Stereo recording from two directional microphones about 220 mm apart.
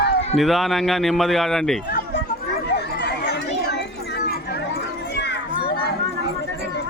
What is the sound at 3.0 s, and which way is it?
Chatter, 50° left (ahead or behind).